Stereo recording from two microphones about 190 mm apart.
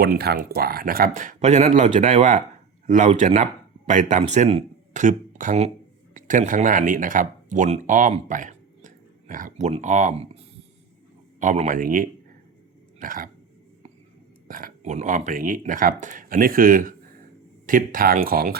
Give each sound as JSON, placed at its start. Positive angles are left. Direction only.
{"t": 0.0, "sound": "speech", "side_deg": -55}
{"t": 13.0, "sound": "throat clearing", "side_deg": -45}
{"t": 14.4, "sound": "speech", "side_deg": -45}